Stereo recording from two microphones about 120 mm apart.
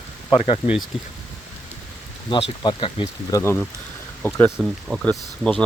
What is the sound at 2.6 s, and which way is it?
Speech, 45° left (ahead or behind).